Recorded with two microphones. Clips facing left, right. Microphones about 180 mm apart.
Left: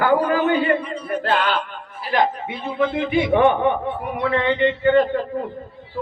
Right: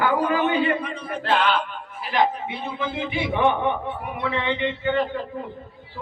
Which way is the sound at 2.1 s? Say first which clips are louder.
Left 2 dB; 50° left (ahead or behind).